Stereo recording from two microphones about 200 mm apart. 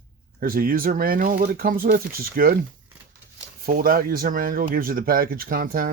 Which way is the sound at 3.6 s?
45° right (ahead or behind).